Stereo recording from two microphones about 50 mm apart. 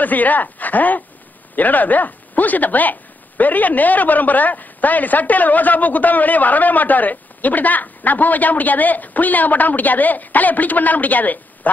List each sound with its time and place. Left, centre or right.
0.0 s speech: left